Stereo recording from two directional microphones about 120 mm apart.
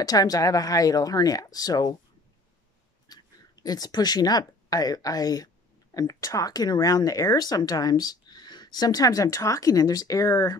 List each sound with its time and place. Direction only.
0.0 s speech: 30° left (ahead or behind)
3.1 s speech: 35° left (ahead or behind)